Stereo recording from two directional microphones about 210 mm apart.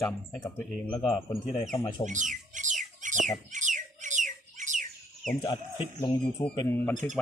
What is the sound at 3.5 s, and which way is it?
Bird, 35° right (ahead or behind).